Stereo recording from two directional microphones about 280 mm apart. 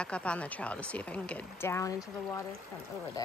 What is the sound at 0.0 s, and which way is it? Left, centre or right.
Speech, centre.